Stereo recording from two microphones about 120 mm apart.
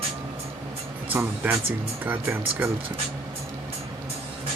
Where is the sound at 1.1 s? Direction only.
15° right (ahead or behind).